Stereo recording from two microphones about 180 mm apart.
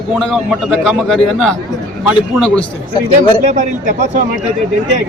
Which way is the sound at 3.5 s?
45° right (ahead or behind).